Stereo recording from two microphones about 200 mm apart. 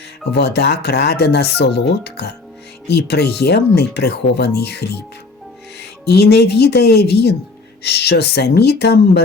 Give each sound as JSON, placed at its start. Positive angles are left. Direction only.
{"t": 0.3, "sound": "speech", "side_deg": 55}
{"t": 6.1, "sound": "speech", "side_deg": 55}